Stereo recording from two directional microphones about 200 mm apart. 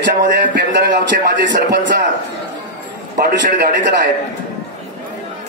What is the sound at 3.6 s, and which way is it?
Speech, 60° right (ahead or behind).